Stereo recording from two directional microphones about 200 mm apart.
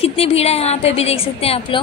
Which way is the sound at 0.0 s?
30° left (ahead or behind).